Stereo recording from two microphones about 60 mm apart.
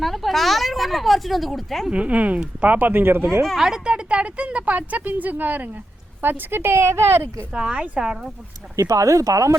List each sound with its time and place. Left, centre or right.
0.0 s speech: centre
1.9 s a woman's voice: right
2.7 s speech: right
3.4 s a woman's voice: centre; by 7.4 s right
7.5 s speech: centre
8.7 s speech: right